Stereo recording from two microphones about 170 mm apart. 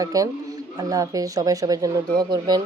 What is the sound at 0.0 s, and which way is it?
Speech, 20° right (ahead or behind).